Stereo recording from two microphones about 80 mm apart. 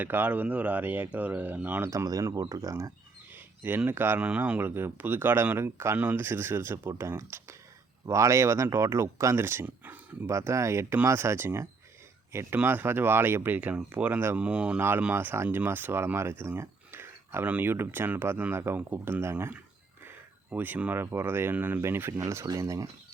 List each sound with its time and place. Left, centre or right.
0.0 s speech: right
1.9 s speech: right
3.3 s a sound: right
3.8 s speech: right
4.3 s speech: centre; by 9.6 s right
9.6 s speech: right
10.2 s speech: right; by 14.8 s centre
14.8 s speech: right
20.1 s a sound: right
21.0 s speech: right